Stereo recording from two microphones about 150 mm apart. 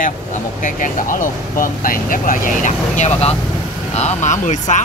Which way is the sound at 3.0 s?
45° left (ahead or behind).